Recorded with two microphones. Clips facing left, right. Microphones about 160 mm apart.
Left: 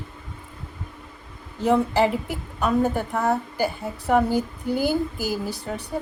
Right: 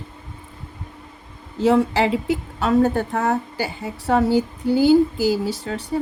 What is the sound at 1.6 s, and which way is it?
A woman's voice, 90° right.